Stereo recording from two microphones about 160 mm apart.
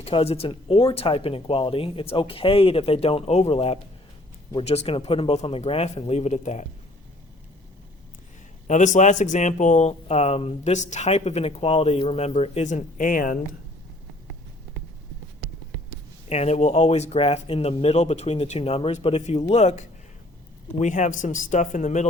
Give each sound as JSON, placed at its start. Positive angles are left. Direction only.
{"t": 0.0, "sound": "speech", "side_deg": 35}
{"t": 8.6, "sound": "speech", "side_deg": 50}
{"t": 16.3, "sound": "speech", "side_deg": 45}